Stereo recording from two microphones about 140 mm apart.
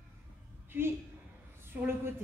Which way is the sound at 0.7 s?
15° right (ahead or behind).